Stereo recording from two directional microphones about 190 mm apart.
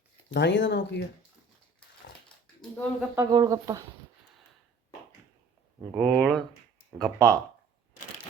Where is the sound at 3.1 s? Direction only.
20° right (ahead or behind).